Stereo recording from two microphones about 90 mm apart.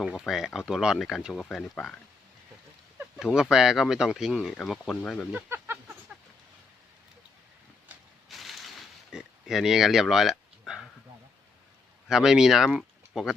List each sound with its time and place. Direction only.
0.0 s speech: 5° right (ahead or behind)
3.2 s speech: 5° right (ahead or behind)
4.7 s speech: 5° left (ahead or behind)
5.5 s a sound: 25° right (ahead or behind)
8.3 s a sound: centre (ahead or behind)
12.0 s speech: 5° right (ahead or behind)